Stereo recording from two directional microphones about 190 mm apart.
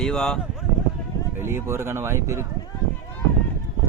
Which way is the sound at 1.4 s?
15° right (ahead or behind).